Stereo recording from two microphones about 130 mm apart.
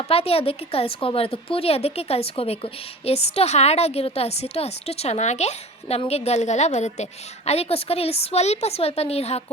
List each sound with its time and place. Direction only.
0.0 s a woman's voice: 50° left (ahead or behind)